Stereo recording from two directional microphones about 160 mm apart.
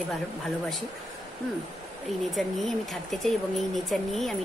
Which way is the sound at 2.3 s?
Centre (ahead or behind).